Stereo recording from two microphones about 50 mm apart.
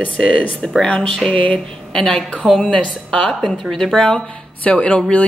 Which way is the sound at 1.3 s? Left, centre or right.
Left.